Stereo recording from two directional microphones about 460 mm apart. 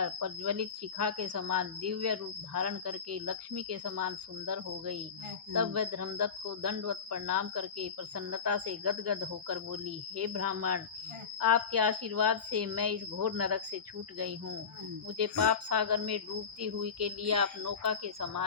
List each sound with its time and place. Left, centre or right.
0.0 s speech: right